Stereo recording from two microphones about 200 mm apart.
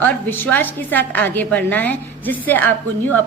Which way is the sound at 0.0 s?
10° left (ahead or behind).